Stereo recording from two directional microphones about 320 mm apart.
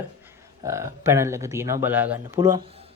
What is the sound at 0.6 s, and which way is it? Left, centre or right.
Speech, centre.